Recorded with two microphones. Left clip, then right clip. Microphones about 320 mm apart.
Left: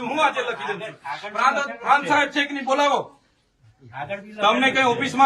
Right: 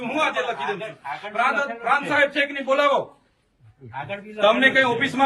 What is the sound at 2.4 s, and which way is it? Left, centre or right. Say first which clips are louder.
Speech: even; centre.